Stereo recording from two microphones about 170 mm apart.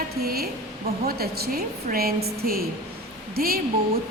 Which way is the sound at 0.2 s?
65° right (ahead or behind).